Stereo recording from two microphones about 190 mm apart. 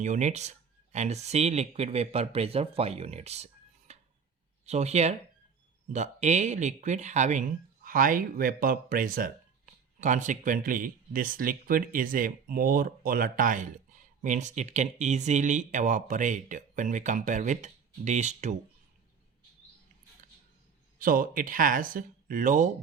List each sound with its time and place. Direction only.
0.0 s speech: 40° right (ahead or behind)
21.0 s speech: 50° right (ahead or behind)